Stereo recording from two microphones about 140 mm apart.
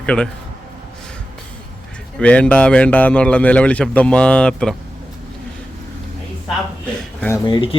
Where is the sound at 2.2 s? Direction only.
10° left (ahead or behind).